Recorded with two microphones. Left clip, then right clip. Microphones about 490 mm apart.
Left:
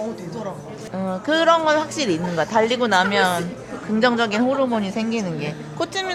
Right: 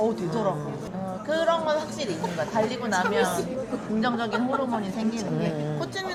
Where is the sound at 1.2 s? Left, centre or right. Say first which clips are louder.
Left 7 dB; left.